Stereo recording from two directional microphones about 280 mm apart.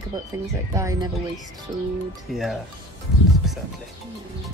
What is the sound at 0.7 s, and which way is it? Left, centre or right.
Speech, centre.